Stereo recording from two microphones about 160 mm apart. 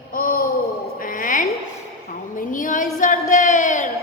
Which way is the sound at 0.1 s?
60° left (ahead or behind).